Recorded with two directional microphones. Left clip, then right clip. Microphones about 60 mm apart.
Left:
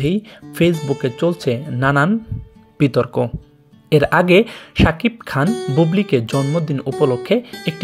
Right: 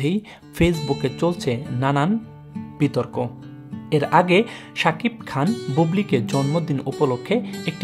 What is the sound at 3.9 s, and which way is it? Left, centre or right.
Speech, left.